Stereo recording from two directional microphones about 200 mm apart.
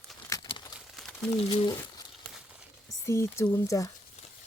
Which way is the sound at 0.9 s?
Centre (ahead or behind).